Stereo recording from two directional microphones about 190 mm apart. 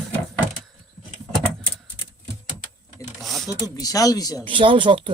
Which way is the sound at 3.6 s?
20° left (ahead or behind).